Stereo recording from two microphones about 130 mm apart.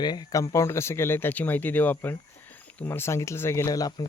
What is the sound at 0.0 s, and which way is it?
Speech, 35° left (ahead or behind).